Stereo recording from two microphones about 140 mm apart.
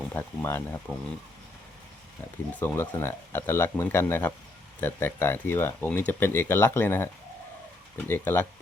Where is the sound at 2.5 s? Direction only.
15° left (ahead or behind).